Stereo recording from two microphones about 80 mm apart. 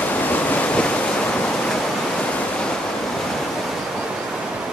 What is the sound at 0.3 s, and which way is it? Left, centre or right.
Waves, centre.